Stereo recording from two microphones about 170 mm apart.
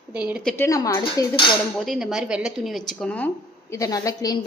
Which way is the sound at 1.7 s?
Centre (ahead or behind).